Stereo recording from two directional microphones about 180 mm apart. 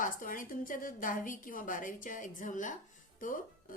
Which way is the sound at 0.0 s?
50° left (ahead or behind).